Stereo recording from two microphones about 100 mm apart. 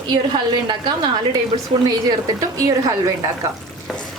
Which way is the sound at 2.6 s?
35° right (ahead or behind).